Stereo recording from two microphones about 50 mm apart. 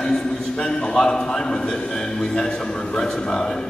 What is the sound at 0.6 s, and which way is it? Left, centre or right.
A man's voice, centre.